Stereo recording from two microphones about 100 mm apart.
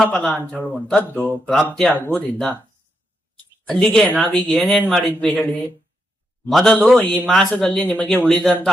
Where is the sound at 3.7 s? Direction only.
5° left (ahead or behind).